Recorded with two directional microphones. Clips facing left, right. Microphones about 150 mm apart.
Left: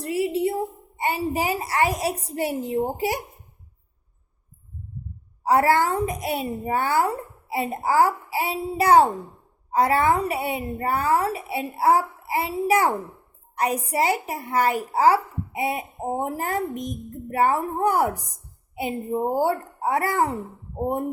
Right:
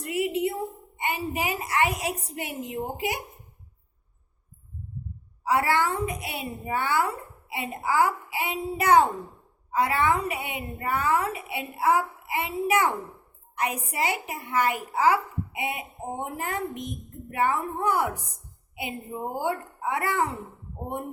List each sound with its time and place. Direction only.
0.0 s a sound: 30° left (ahead or behind)
0.9 s speech: 35° left (ahead or behind)
5.4 s speech: 40° left (ahead or behind)